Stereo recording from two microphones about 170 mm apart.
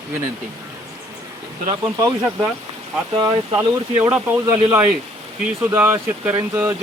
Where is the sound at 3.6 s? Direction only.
10° right (ahead or behind).